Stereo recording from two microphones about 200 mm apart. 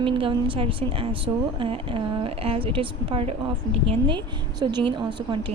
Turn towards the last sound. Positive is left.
turn(degrees=-25)  # may be behind; listen again after turning